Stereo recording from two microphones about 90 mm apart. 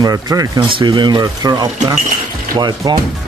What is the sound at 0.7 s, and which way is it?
Speech, 75° right (ahead or behind).